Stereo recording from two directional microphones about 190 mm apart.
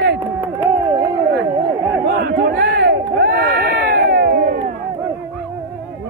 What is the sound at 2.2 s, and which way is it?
Crowd, 55° right (ahead or behind).